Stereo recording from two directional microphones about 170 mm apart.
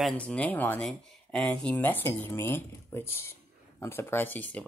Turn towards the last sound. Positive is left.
turn(degrees=10)  # may be behind; listen again after turning